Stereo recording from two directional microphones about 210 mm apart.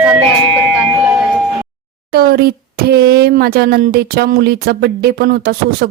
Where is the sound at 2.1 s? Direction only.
45° right (ahead or behind).